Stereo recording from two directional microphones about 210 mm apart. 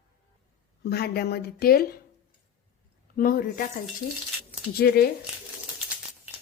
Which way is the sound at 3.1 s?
40° left (ahead or behind).